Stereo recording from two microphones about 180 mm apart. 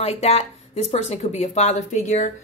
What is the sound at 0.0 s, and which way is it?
Speech, 35° left (ahead or behind).